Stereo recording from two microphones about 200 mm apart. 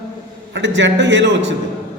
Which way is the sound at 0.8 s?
65° right (ahead or behind).